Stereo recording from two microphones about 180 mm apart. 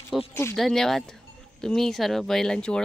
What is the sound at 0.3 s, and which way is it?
Speech, 15° left (ahead or behind).